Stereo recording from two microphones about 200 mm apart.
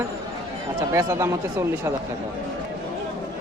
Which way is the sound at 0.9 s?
15° right (ahead or behind).